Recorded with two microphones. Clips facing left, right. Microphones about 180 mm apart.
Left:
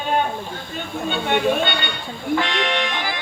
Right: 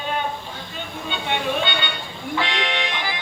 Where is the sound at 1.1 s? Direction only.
50° left (ahead or behind).